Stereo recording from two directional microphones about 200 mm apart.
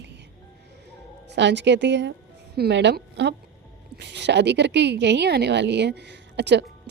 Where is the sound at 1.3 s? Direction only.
60° right (ahead or behind).